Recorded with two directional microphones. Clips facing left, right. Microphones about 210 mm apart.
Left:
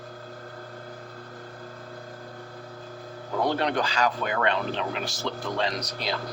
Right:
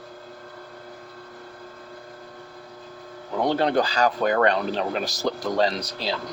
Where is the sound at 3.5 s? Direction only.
30° right (ahead or behind).